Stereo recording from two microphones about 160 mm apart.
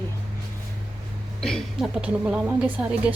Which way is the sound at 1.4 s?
5° left (ahead or behind).